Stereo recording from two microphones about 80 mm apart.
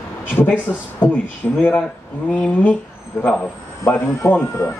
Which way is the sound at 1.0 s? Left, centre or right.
Left.